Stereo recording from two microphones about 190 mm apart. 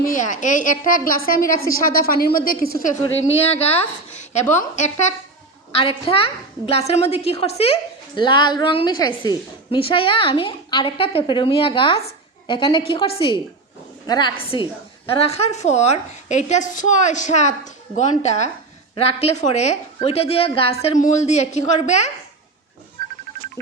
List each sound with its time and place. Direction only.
0.0 s a woman's voice: 45° left (ahead or behind)
3.3 s a woman's voice: 35° left (ahead or behind)
4.1 s a sound: 35° left (ahead or behind)
4.7 s a woman's voice: 40° left (ahead or behind)